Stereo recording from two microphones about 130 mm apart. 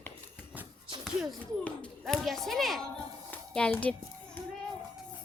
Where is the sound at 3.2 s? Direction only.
10° left (ahead or behind).